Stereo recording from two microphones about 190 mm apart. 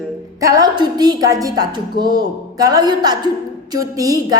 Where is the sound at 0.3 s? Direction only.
20° right (ahead or behind).